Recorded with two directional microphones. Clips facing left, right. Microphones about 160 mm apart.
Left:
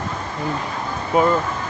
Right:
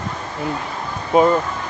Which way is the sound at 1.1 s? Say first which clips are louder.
Right 3 dB; 20° right (ahead or behind).